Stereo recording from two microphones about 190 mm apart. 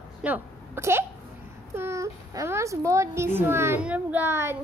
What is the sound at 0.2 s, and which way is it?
A woman's voice, 10° right (ahead or behind).